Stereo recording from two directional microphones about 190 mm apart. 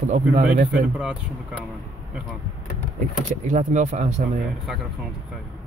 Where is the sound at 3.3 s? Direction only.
40° right (ahead or behind).